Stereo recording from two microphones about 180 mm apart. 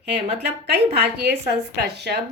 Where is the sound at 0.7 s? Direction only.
65° right (ahead or behind).